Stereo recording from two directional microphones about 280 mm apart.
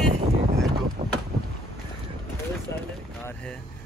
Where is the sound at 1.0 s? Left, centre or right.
Right.